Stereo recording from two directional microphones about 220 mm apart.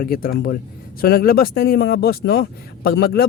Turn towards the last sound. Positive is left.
turn(degrees=45)  # may be behind; listen again after turning